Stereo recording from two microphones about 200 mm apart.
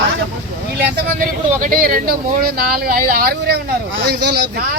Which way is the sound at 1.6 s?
45° right (ahead or behind).